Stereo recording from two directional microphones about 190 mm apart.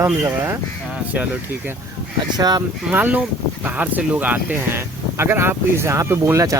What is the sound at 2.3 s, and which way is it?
Speech, 20° right (ahead or behind).